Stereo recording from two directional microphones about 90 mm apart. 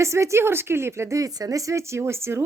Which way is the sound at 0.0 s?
30° right (ahead or behind).